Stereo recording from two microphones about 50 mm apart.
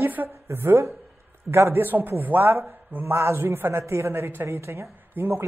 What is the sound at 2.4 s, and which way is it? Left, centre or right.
Speech, right.